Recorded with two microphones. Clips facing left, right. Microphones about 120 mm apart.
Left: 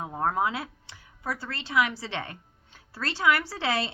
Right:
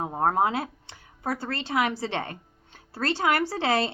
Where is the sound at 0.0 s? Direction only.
40° right (ahead or behind).